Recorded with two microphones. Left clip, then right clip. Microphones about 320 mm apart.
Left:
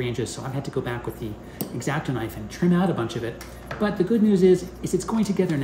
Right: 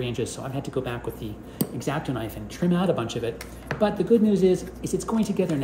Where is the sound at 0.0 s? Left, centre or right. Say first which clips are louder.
Left 1 dB; centre.